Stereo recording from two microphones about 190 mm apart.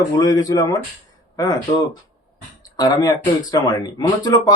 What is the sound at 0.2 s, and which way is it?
Speech, 20° left (ahead or behind).